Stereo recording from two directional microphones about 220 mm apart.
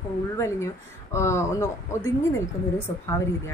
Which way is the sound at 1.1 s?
10° left (ahead or behind).